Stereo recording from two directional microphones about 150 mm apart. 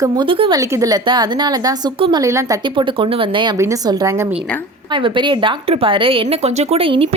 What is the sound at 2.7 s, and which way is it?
Speech, 35° right (ahead or behind).